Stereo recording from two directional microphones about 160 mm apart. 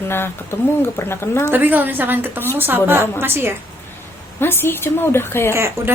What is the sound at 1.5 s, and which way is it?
A woman's voice, 10° right (ahead or behind).